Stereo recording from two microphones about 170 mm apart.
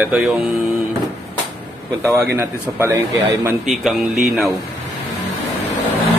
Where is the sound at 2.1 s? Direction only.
15° right (ahead or behind).